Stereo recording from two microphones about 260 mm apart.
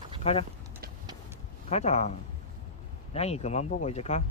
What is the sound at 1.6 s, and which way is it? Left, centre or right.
Speech, left.